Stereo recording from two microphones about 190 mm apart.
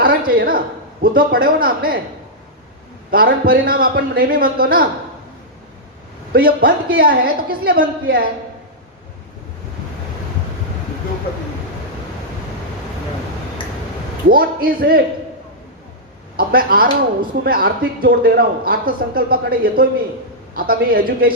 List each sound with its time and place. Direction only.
0.3 s speech: 50° right (ahead or behind)
3.1 s speech: 50° right (ahead or behind)
6.3 s speech: 50° right (ahead or behind)
14.3 s speech: 50° right (ahead or behind)
16.4 s speech: 50° right (ahead or behind)